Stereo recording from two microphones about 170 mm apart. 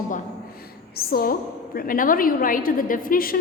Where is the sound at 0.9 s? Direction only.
60° left (ahead or behind).